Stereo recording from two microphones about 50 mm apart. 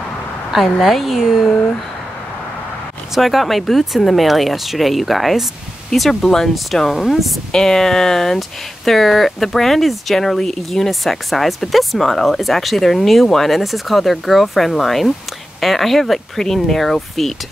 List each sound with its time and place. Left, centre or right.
0.7 s speech: centre
3.2 s speech: centre